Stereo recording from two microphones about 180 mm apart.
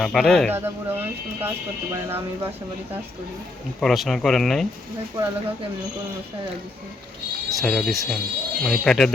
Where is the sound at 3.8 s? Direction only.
Centre (ahead or behind).